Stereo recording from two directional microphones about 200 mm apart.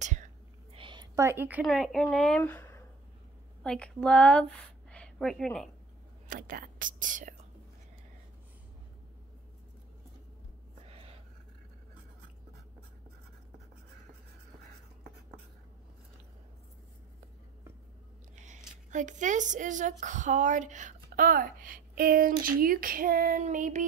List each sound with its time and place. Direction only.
0.0 s whispering: 35° right (ahead or behind)
0.7 s speech: 25° right (ahead or behind); by 4.5 s 5° left (ahead or behind)
4.9 s a sound: 5° left (ahead or behind)
6.2 s speech: 45° right (ahead or behind)
18.3 s a sound: 35° right (ahead or behind)
18.9 s a woman's voice: 40° right (ahead or behind)